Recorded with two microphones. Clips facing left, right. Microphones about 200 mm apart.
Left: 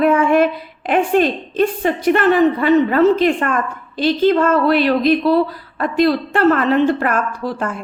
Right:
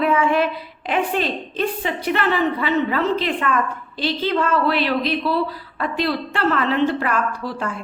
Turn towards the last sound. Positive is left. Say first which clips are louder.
# left 4 dB
turn(degrees=50)  # may be behind; listen again after turning